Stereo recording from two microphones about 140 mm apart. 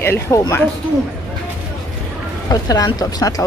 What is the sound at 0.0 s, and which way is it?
Speech, 15° left (ahead or behind).